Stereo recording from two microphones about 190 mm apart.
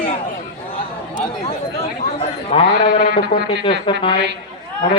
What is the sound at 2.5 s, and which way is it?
A man's voice, 35° left (ahead or behind).